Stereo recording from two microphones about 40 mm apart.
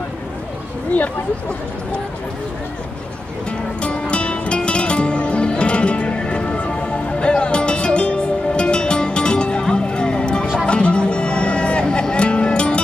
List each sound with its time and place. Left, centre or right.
3.8 s music: left